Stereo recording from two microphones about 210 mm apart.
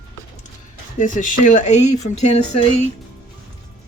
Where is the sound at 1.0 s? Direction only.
40° left (ahead or behind).